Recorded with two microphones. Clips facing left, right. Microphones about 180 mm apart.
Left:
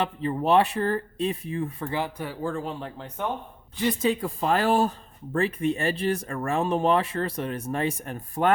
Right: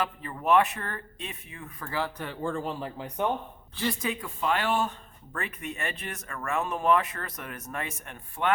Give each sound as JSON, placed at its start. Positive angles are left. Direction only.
{"t": 0.0, "sound": "speech", "side_deg": 30}
{"t": 3.8, "sound": "speech", "side_deg": 20}
{"t": 4.1, "sound": "speech", "side_deg": 35}